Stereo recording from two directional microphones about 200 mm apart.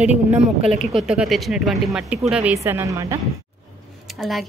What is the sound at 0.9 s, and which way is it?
Speech, centre (ahead or behind).